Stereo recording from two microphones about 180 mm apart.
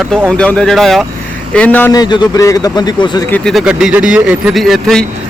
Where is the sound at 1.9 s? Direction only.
25° left (ahead or behind).